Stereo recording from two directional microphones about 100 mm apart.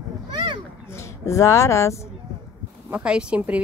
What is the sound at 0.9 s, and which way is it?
Speech, 30° left (ahead or behind).